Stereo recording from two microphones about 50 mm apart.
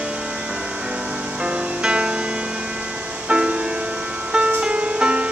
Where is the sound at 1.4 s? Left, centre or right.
Right.